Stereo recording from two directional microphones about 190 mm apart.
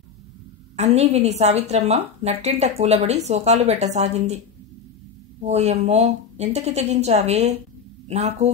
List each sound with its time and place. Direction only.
0.7 s a woman's voice: 35° right (ahead or behind)
5.4 s a woman's voice: 35° right (ahead or behind)